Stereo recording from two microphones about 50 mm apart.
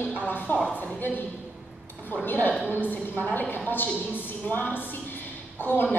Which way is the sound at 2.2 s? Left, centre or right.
Left.